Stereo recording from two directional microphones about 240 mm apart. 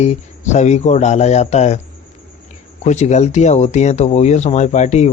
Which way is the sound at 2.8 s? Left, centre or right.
Left.